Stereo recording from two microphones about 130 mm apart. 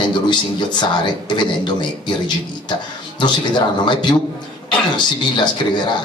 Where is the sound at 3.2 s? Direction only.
35° left (ahead or behind).